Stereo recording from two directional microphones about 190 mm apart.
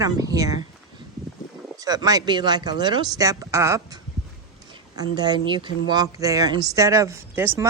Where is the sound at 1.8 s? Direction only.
20° right (ahead or behind).